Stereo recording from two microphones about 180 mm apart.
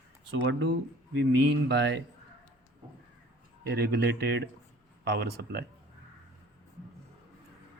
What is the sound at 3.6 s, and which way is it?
Speech, 65° right (ahead or behind).